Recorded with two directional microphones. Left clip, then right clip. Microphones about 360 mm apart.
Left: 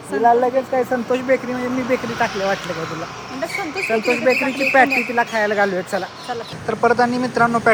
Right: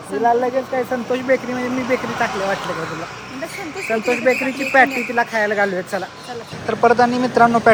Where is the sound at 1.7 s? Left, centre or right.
Right.